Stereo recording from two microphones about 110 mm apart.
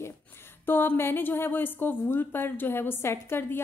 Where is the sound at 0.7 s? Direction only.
20° left (ahead or behind).